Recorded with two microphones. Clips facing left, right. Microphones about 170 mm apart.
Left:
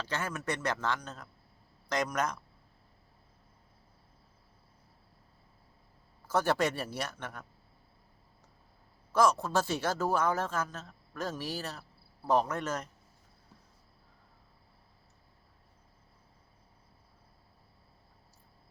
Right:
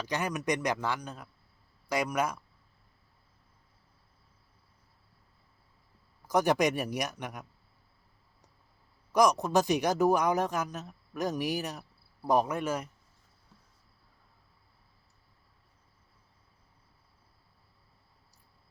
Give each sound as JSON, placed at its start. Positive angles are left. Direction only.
{"t": 0.0, "sound": "speech", "side_deg": -15}
{"t": 6.2, "sound": "speech", "side_deg": -15}
{"t": 9.1, "sound": "speech", "side_deg": -15}